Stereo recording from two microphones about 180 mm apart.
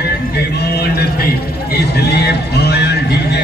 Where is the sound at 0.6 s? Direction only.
60° left (ahead or behind).